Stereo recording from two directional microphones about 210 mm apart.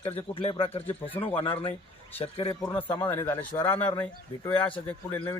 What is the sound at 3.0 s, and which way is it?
A man's voice, 10° left (ahead or behind).